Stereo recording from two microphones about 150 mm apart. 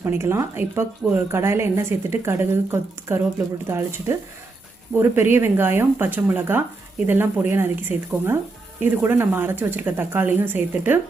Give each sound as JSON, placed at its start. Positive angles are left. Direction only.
{"t": 0.0, "sound": "a woman's voice", "side_deg": -15}